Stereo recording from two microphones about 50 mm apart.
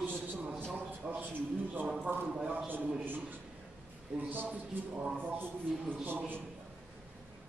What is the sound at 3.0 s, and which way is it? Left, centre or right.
Speech, right.